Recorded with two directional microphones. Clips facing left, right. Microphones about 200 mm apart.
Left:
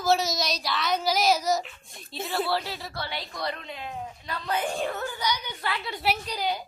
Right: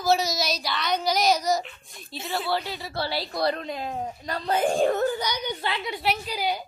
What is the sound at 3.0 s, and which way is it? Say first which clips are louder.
Speech: right 9 dB; 35° right (ahead or behind).